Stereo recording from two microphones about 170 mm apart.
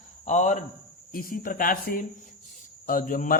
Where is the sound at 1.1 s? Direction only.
55° left (ahead or behind).